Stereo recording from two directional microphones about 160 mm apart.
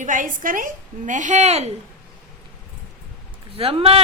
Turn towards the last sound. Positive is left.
turn(degrees=-35)  # may be behind; listen again after turning